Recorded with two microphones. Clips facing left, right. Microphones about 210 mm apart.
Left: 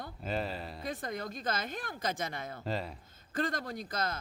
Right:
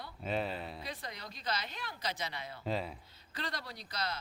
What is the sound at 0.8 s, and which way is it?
A man's voice, 50° left (ahead or behind).